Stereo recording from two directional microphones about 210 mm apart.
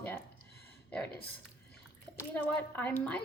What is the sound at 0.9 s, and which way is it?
Speech, 5° left (ahead or behind).